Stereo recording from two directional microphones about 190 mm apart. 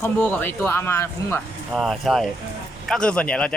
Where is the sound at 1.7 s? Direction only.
Centre (ahead or behind).